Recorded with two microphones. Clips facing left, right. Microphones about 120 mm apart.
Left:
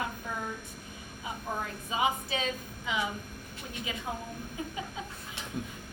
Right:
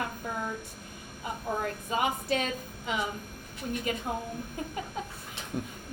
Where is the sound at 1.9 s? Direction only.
55° right (ahead or behind).